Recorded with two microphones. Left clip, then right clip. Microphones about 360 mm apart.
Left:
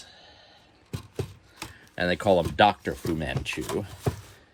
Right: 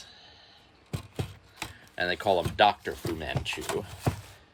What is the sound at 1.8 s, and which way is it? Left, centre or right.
Speech, centre.